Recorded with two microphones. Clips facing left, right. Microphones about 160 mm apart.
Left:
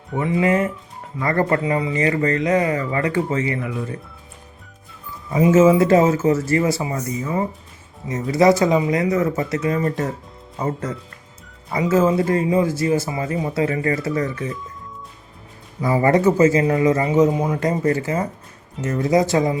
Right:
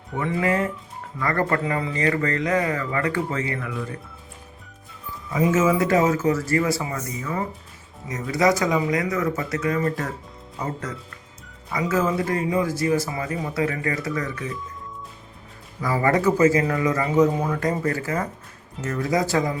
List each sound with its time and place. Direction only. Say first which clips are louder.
0.2 s speech: left 4 dB; 20° left (ahead or behind)
5.3 s speech: left 6 dB; 25° left (ahead or behind)
15.8 s speech: left 4 dB; 25° left (ahead or behind)